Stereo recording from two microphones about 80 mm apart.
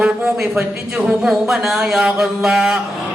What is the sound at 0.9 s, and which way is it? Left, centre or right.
A man's voice, centre.